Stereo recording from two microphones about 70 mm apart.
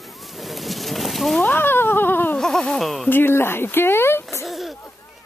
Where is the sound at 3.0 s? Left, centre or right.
Left.